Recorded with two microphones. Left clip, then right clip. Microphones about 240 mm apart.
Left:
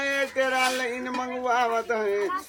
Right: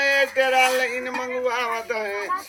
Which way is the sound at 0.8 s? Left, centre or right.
Centre.